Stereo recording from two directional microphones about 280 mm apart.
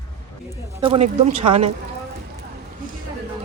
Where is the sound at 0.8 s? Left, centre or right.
Right.